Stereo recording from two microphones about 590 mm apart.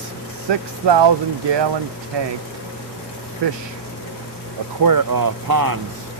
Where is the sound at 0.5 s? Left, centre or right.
Right.